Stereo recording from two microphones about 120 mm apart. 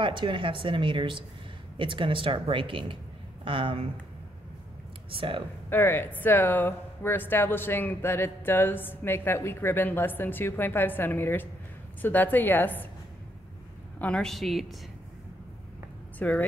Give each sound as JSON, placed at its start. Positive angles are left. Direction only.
{"t": 0.0, "sound": "speech", "side_deg": -45}
{"t": 5.1, "sound": "speech", "side_deg": -50}
{"t": 5.7, "sound": "speech", "side_deg": 20}
{"t": 13.9, "sound": "a woman's voice", "side_deg": 10}
{"t": 16.2, "sound": "speech", "side_deg": 15}